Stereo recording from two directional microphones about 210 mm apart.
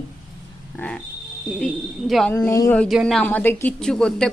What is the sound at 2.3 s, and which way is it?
A woman's voice, 15° left (ahead or behind).